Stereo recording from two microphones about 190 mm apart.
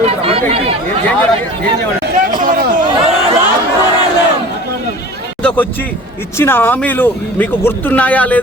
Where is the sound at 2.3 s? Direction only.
45° right (ahead or behind).